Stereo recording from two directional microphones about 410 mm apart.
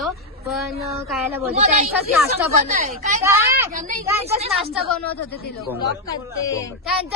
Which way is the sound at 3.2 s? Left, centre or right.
Centre.